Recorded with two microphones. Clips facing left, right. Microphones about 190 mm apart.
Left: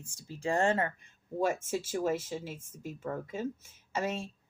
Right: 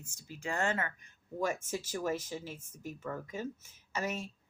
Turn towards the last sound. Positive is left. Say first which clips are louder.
# left 3 dB
turn(degrees=25)  # may be behind; listen again after turning